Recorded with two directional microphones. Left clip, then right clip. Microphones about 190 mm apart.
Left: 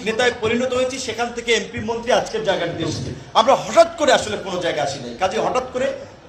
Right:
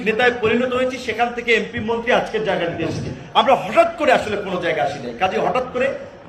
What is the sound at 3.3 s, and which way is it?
A man's voice, 30° left (ahead or behind).